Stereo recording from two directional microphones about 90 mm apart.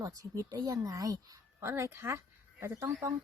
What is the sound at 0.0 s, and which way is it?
A woman's voice, 40° right (ahead or behind).